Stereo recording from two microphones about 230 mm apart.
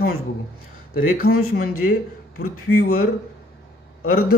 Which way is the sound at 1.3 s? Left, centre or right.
Left.